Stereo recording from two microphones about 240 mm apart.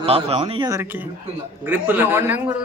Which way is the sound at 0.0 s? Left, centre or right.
Right.